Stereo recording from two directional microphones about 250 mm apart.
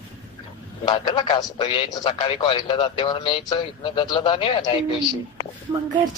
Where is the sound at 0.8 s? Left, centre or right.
Centre.